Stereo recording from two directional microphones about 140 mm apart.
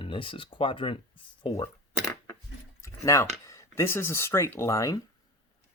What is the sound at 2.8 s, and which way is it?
Speech, 20° left (ahead or behind).